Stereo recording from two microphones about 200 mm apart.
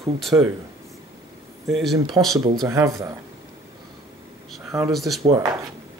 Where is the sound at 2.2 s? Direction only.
10° right (ahead or behind).